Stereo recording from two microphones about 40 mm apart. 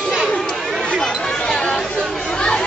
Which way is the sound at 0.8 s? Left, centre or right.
Centre.